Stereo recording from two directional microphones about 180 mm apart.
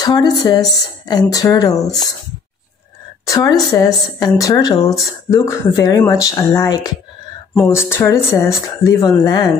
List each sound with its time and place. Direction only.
0.0 s speech: 20° left (ahead or behind)
3.3 s speech: 20° left (ahead or behind)